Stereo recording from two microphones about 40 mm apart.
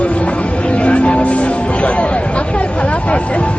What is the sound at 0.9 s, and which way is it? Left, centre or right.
Music, left.